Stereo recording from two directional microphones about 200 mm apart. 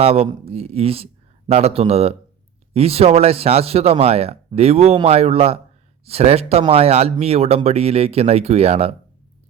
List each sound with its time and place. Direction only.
0.0 s speech: 30° right (ahead or behind)